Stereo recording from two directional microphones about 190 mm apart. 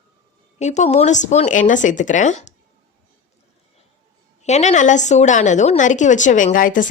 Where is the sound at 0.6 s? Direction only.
35° left (ahead or behind).